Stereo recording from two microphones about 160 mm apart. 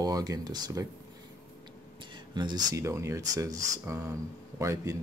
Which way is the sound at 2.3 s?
25° right (ahead or behind).